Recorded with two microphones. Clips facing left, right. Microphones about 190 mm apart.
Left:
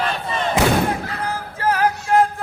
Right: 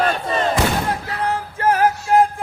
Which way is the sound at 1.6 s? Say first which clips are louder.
Right 2 dB; 50° right (ahead or behind).